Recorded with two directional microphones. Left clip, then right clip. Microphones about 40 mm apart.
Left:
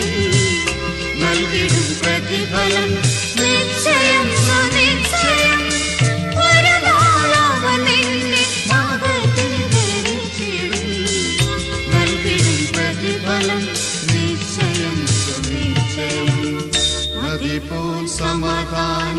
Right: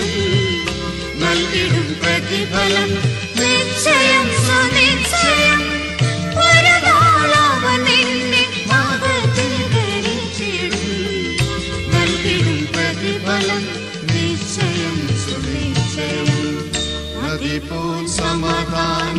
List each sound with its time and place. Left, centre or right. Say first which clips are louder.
0.2 s music: left 2 dB; left
1.2 s music: right 1 dB; centre
2.6 s music: right 1 dB; centre
3.4 s music: right 2 dB; centre
6.4 s music: right 2 dB; right
18.3 s music: right 1 dB; centre